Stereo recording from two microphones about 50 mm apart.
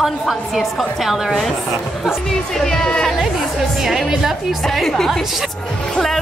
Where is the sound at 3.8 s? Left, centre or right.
Centre.